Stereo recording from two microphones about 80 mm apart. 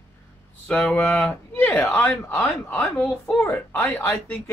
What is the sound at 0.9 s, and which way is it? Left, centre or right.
Speech, centre.